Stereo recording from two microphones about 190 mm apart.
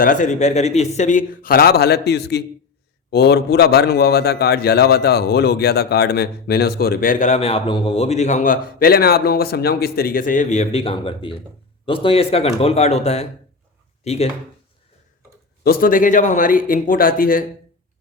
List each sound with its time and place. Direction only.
0.0 s a man's voice: 45° left (ahead or behind)
15.6 s speech: 50° left (ahead or behind)